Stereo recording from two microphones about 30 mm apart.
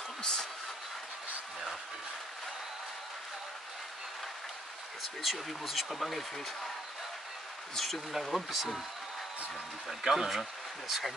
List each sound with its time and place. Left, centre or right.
0.2 s a sound: left
5.2 s speech: centre
7.7 s speech: centre
8.1 s speech: centre
9.8 s speech: centre